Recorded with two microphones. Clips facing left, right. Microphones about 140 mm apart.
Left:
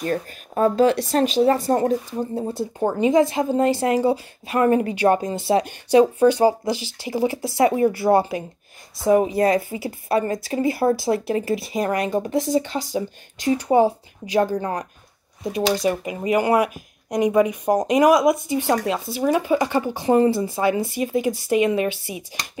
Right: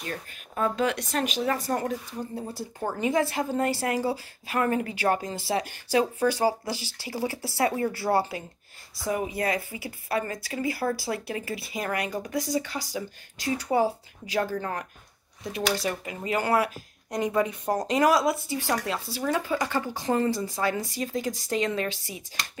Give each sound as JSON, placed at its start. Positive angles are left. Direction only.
{"t": 0.0, "sound": "speech", "side_deg": 40}
{"t": 9.1, "sound": "speech", "side_deg": 30}